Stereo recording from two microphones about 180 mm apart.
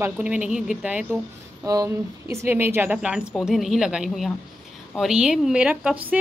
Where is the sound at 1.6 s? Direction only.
20° right (ahead or behind).